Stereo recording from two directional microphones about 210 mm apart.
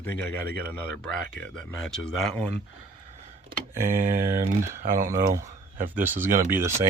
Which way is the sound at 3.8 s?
40° right (ahead or behind).